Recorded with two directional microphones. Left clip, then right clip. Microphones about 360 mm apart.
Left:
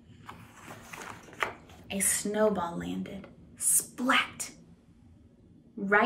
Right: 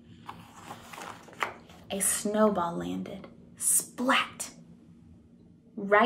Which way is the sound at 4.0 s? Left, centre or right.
Centre.